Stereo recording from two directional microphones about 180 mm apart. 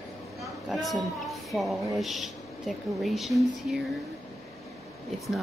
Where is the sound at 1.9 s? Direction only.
Centre (ahead or behind).